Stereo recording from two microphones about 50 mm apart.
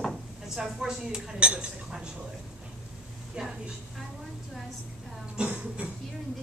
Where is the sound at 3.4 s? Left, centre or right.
Right.